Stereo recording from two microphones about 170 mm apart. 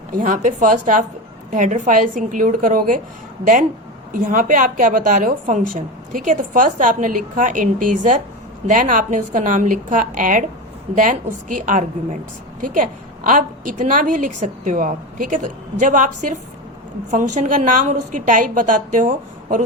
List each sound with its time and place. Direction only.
0.1 s a woman's voice: 50° right (ahead or behind)